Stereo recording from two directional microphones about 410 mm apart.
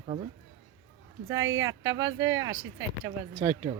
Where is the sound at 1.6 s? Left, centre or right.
Centre.